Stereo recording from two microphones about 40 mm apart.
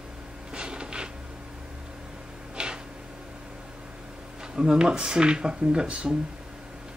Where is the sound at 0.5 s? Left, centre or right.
Right.